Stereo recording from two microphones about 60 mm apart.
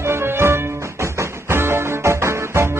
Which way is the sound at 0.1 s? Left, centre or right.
Right.